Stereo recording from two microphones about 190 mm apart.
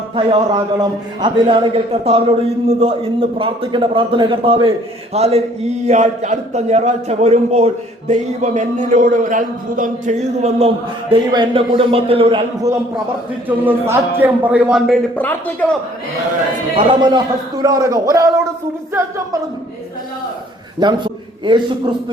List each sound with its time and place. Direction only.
0.2 s a man's voice: 25° right (ahead or behind)
11.1 s a man's voice: 25° right (ahead or behind)
13.7 s a man's voice: 10° right (ahead or behind)
15.1 s speech: 10° left (ahead or behind)
16.7 s a man's voice: 25° right (ahead or behind)
20.7 s a man's voice: 25° right (ahead or behind)